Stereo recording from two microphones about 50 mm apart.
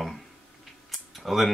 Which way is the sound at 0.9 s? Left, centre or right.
Centre.